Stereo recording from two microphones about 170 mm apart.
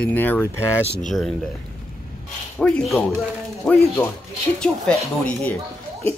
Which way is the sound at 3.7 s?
15° left (ahead or behind).